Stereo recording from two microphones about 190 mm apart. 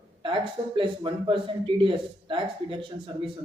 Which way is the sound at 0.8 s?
25° right (ahead or behind).